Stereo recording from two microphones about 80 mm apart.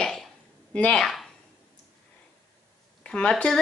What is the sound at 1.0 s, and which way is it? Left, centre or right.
Speech, centre.